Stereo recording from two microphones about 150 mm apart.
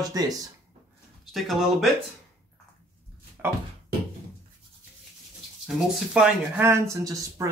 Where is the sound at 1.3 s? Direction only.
Centre (ahead or behind).